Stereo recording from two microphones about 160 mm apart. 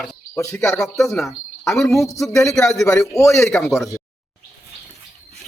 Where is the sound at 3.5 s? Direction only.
5° left (ahead or behind).